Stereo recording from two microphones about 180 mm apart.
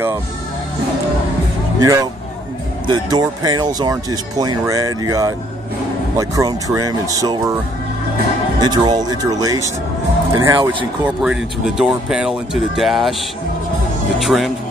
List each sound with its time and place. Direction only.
1.8 s speech: 15° right (ahead or behind)
8.5 s speech: 25° right (ahead or behind)
11.1 s speech: 5° right (ahead or behind)
14.2 s speech: centre (ahead or behind)